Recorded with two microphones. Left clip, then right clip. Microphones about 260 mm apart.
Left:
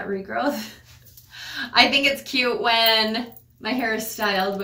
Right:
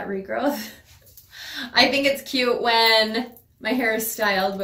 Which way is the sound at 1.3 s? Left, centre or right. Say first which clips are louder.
Left 2 dB; centre.